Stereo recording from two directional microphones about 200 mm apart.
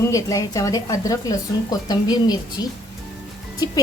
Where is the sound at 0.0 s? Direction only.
15° left (ahead or behind).